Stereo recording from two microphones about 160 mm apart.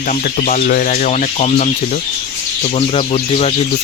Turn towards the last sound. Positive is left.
turn(degrees=35)  # may be behind; listen again after turning